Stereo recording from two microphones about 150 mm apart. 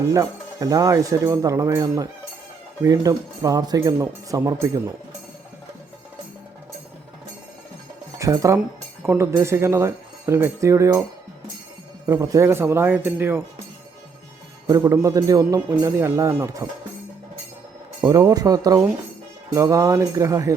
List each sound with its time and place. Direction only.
0.1 s speech: 20° right (ahead or behind)
8.2 s speech: 20° right (ahead or behind)
12.0 s a man's voice: 20° right (ahead or behind)
14.7 s speech: 25° right (ahead or behind)
18.0 s speech: 25° right (ahead or behind)